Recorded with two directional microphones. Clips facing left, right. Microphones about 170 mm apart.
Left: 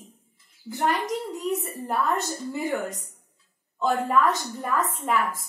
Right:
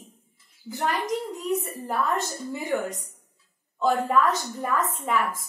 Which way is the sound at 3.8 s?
Centre (ahead or behind).